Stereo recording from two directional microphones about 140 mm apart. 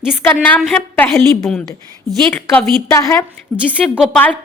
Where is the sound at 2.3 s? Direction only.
10° left (ahead or behind).